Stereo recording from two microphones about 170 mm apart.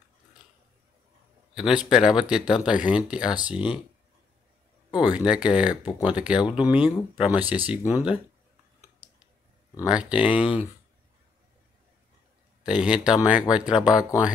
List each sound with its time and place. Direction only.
1.5 s speech: 5° right (ahead or behind)
5.1 s speech: 5° right (ahead or behind)
5.9 s speech: 25° left (ahead or behind)
6.1 s speech: 5° right (ahead or behind)
9.8 s speech: 5° right (ahead or behind)
12.6 s speech: 5° right (ahead or behind)